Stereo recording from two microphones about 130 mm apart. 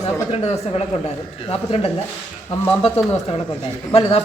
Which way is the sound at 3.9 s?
50° left (ahead or behind).